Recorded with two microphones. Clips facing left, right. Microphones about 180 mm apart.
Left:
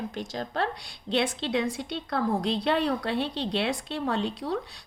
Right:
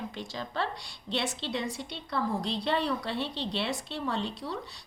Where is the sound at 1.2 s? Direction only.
90° left.